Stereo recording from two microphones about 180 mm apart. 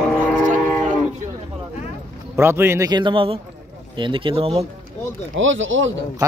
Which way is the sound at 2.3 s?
15° right (ahead or behind).